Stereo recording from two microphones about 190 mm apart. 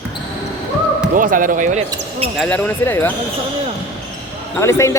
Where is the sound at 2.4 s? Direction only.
10° left (ahead or behind).